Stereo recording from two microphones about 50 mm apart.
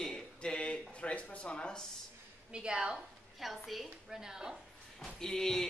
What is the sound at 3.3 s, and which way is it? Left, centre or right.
Speech, centre.